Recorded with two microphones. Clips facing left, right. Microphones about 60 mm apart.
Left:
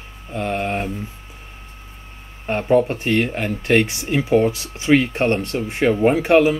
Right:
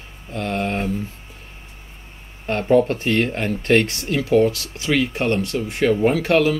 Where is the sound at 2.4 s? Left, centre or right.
Centre.